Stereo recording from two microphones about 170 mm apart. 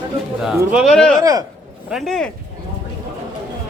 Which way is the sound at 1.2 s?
20° right (ahead or behind).